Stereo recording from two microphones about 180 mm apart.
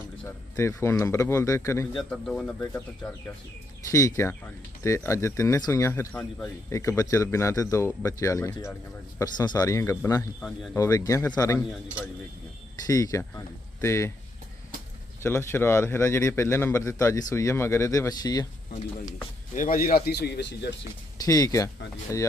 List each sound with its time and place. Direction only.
0.3 s speech: 15° left (ahead or behind)
2.0 s a man's voice: 5° left (ahead or behind); by 11.6 s 20° left (ahead or behind)
12.9 s a man's voice: 20° left (ahead or behind)
15.2 s speech: 15° left (ahead or behind)
19.5 s speech: 50° left (ahead or behind)
20.1 s speech: 65° left (ahead or behind)
21.2 s a man's voice: 20° left (ahead or behind)